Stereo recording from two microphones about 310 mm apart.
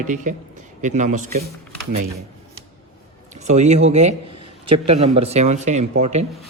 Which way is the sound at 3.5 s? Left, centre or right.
Right.